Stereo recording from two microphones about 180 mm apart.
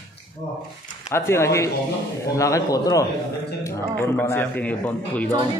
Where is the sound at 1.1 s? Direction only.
15° left (ahead or behind).